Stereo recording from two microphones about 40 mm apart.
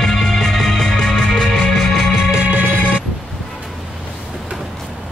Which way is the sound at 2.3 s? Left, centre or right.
Right.